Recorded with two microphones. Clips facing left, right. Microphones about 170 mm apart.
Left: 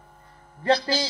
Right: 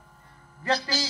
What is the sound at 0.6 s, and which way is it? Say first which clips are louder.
Speech: left 5 dB; 30° left (ahead or behind).